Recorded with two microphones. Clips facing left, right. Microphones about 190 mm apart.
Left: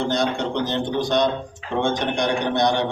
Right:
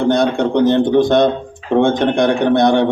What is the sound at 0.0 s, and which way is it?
A man's voice, 55° right (ahead or behind).